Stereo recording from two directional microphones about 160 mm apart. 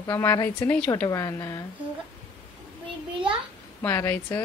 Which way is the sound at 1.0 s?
20° left (ahead or behind).